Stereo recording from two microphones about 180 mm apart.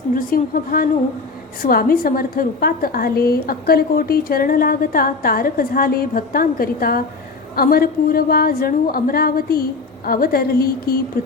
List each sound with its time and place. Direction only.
0.1 s a woman's voice: 50° left (ahead or behind)